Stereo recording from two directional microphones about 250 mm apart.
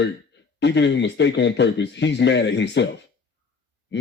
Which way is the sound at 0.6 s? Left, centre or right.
Left.